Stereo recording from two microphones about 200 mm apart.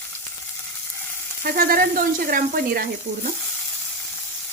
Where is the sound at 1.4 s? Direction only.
45° right (ahead or behind).